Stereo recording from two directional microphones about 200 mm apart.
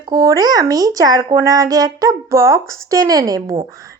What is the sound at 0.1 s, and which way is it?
Speech, 20° right (ahead or behind).